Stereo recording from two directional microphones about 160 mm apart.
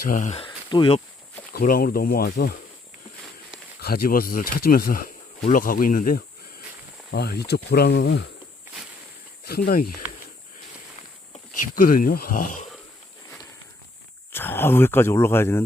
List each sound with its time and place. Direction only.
0.0 s speech: 55° left (ahead or behind)
0.3 s speech: 30° left (ahead or behind)
1.5 s speech: 65° left (ahead or behind)
3.8 s speech: 75° left (ahead or behind); by 6.2 s 60° left (ahead or behind)
7.1 s speech: 90° left
9.5 s speech: 65° left (ahead or behind)
11.7 s speech: 60° left (ahead or behind)
14.3 s speech: 15° left (ahead or behind)